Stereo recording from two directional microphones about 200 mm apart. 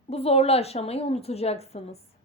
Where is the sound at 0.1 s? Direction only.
30° left (ahead or behind).